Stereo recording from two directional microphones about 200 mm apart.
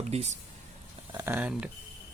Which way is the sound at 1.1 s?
10° right (ahead or behind).